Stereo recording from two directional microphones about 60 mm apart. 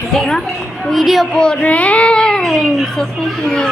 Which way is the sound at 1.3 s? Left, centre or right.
Centre.